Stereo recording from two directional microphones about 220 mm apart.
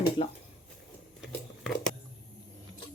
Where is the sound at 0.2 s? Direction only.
25° left (ahead or behind).